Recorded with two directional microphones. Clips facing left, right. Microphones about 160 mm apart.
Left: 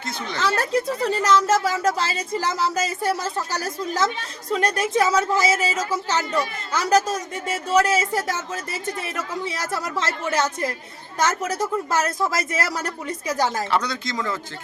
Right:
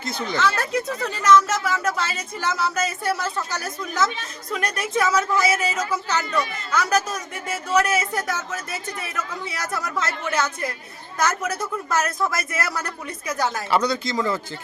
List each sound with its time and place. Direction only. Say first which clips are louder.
0.0 s speech: right 2 dB; centre (ahead or behind)
0.3 s a woman's voice: left 1 dB; 40° left (ahead or behind)
9.7 s a woman's voice: right 1 dB; 30° left (ahead or behind)
11.9 s a woman's voice: left 1 dB; 30° left (ahead or behind)
13.7 s speech: right 3 dB; 5° right (ahead or behind)